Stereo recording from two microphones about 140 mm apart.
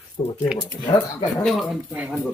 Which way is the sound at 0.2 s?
45° left (ahead or behind).